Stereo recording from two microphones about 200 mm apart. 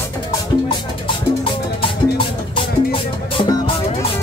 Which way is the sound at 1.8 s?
25° left (ahead or behind).